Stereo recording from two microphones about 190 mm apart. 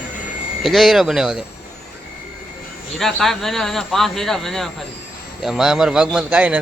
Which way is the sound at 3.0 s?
Centre (ahead or behind).